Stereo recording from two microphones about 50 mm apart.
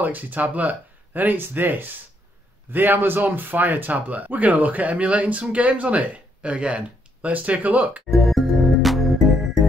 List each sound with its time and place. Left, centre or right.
0.0 s speech: right
8.1 s music: centre